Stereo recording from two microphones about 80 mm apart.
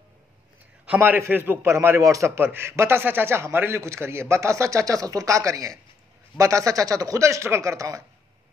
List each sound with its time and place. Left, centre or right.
0.9 s a man's voice: right
2.3 s a man's voice: right